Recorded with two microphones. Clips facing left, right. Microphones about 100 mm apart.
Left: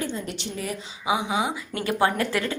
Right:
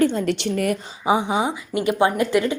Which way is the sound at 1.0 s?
35° right (ahead or behind).